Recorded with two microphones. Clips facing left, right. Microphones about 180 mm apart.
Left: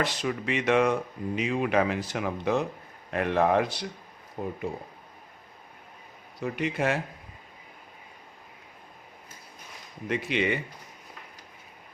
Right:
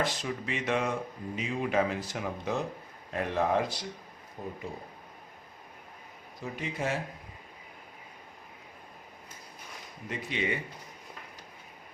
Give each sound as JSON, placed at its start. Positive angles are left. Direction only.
{"t": 0.0, "sound": "speech", "side_deg": 75}
{"t": 6.4, "sound": "speech", "side_deg": 70}
{"t": 10.1, "sound": "speech", "side_deg": 80}